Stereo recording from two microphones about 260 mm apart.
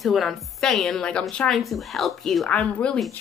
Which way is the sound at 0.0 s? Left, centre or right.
Centre.